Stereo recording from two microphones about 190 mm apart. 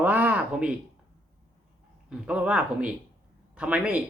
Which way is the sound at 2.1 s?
5° right (ahead or behind).